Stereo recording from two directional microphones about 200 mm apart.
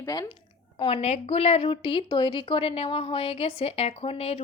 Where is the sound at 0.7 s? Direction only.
30° left (ahead or behind).